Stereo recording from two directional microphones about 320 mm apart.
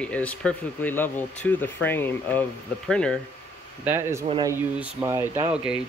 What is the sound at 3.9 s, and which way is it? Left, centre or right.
Speech, centre.